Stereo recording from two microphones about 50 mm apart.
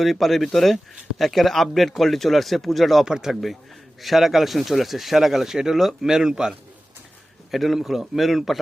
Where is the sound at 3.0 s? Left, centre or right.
Centre.